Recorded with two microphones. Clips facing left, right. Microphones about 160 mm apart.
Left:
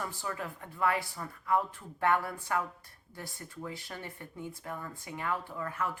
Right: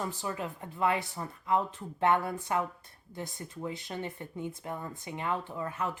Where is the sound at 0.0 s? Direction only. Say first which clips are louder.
Right 3 dB; 20° right (ahead or behind).